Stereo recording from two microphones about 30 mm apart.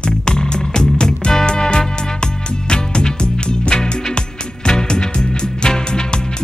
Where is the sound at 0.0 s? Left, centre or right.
Left.